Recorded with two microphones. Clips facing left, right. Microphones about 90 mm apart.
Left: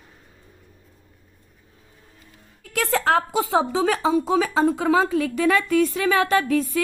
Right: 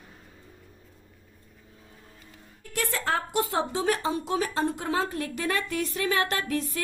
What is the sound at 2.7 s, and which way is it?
Speech, 90° left.